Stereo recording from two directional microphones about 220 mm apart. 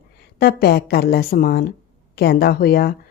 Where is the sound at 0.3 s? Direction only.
45° left (ahead or behind).